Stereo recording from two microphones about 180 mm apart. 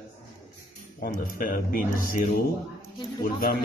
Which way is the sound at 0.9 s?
55° left (ahead or behind).